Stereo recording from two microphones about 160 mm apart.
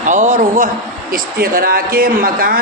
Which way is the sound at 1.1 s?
65° right (ahead or behind).